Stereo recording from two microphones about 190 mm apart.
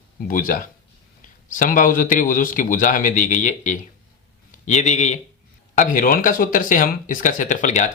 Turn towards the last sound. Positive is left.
turn(degrees=40)  # may be behind; listen again after turning